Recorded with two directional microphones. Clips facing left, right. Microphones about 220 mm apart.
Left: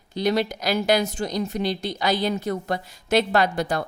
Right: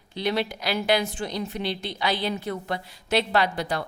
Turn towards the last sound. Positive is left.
turn(degrees=45)  # may be behind; listen again after turning